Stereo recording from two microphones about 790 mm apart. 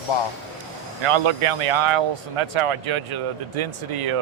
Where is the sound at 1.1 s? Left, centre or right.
Right.